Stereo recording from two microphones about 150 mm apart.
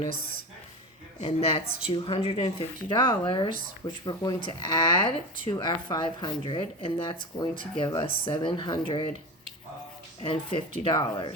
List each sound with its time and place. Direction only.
1.2 s speech: 40° left (ahead or behind)
8.0 s speech: 35° left (ahead or behind)
10.2 s speech: 35° left (ahead or behind)